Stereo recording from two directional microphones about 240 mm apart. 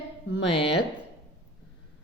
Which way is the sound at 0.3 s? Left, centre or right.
Left.